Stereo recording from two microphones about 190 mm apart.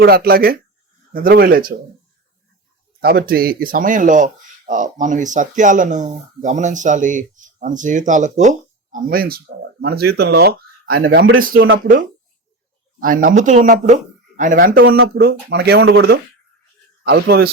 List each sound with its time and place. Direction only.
0.0 s speech: 50° right (ahead or behind)
3.0 s speech: 55° right (ahead or behind); by 11.2 s 75° right (ahead or behind)
13.0 s speech: 45° right (ahead or behind)
14.5 s speech: 55° right (ahead or behind); by 16.1 s 75° right (ahead or behind)
17.2 s speech: 55° right (ahead or behind)